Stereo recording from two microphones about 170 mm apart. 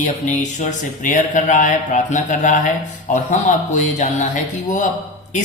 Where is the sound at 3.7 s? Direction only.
45° left (ahead or behind).